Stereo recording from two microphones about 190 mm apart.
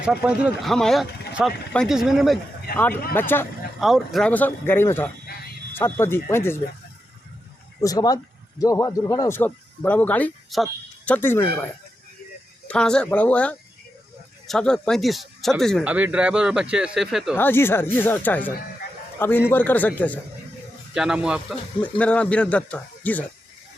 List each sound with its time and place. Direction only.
0.0 s speech: 5° right (ahead or behind)
2.9 s speech: 50° left (ahead or behind)
3.2 s speech: 10° left (ahead or behind)
3.8 s speech: centre (ahead or behind)
7.8 s speech: 20° left (ahead or behind)
12.6 s speech: 5° left (ahead or behind)
15.9 s speech: 10° right (ahead or behind)
17.3 s speech: 10° left (ahead or behind)
20.9 s speech: 5° right (ahead or behind)
21.9 s speech: 5° left (ahead or behind)